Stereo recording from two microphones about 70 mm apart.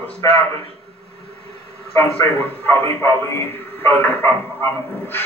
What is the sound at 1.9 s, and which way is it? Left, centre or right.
A man's voice, left.